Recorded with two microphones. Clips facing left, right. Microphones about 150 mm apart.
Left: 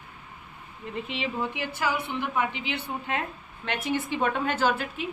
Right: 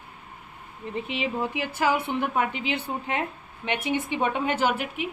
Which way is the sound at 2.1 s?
45° right (ahead or behind).